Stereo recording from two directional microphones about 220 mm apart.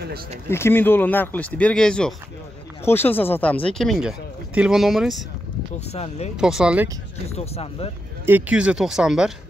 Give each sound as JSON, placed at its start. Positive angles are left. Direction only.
{"t": 0.5, "sound": "speech", "side_deg": 10}
{"t": 5.9, "sound": "speech", "side_deg": 30}
{"t": 6.3, "sound": "speech", "side_deg": -5}
{"t": 7.2, "sound": "speech", "side_deg": 30}
{"t": 8.3, "sound": "speech", "side_deg": -5}